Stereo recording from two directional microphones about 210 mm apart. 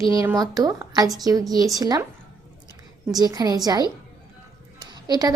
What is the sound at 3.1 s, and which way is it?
Speech, 20° right (ahead or behind).